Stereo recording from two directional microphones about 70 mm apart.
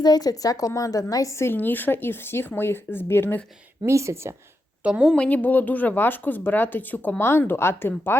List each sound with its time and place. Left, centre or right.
0.0 s a woman's voice: left
1.5 s speech: left
3.8 s speech: right
4.8 s a woman's voice: centre
5.1 s speech: centre; by 8.2 s left